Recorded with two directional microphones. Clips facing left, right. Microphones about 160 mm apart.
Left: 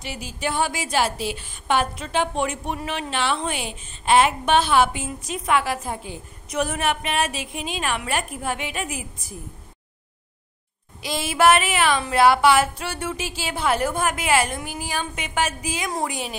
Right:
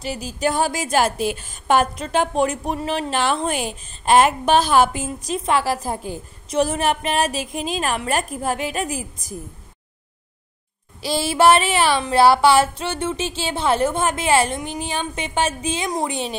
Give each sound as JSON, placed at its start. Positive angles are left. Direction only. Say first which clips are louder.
{"t": 0.0, "sound": "a woman's voice", "louder": "right 6 dB", "side_deg": -40}
{"t": 11.0, "sound": "a woman's voice", "louder": "right 3 dB", "side_deg": -30}